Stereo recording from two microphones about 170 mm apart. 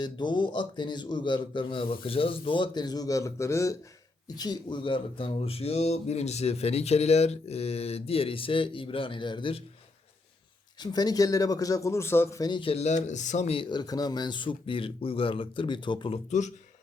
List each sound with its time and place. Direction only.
0.0 s speech: 25° left (ahead or behind)
10.8 s speech: 25° left (ahead or behind); by 16.5 s 40° left (ahead or behind)